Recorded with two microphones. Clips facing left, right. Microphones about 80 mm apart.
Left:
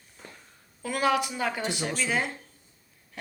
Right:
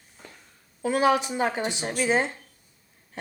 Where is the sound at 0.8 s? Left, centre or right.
Right.